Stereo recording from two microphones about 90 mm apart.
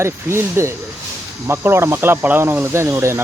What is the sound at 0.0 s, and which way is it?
Speech, 30° right (ahead or behind).